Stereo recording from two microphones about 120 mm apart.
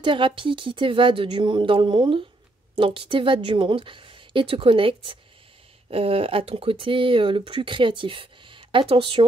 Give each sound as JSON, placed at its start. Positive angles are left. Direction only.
{"t": 0.0, "sound": "speech", "side_deg": -45}